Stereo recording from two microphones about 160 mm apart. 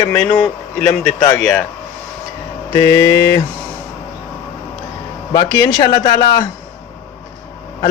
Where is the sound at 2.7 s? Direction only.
20° left (ahead or behind).